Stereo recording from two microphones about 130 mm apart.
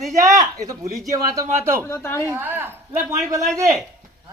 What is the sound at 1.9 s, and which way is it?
Speech, 20° left (ahead or behind).